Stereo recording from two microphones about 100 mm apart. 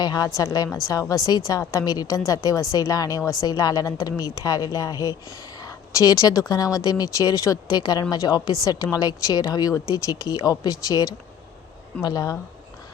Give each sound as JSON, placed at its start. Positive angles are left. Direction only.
{"t": 0.0, "sound": "a woman's voice", "side_deg": 40}
{"t": 5.6, "sound": "a sound", "side_deg": 35}
{"t": 6.5, "sound": "a woman's voice", "side_deg": 40}